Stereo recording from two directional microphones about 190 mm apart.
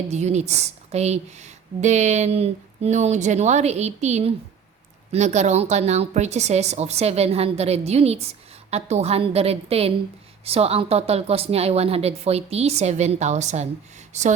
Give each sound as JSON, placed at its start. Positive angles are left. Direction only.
{"t": 0.1, "sound": "a woman's voice", "side_deg": -35}